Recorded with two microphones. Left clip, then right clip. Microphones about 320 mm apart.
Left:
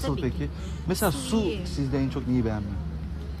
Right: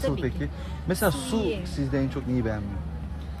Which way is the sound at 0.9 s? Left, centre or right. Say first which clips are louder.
Right 1 dB; centre.